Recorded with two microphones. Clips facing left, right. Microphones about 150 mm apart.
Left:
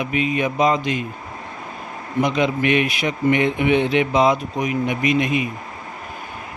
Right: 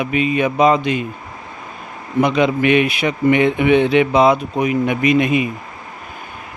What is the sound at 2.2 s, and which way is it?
A man's voice, 65° right (ahead or behind).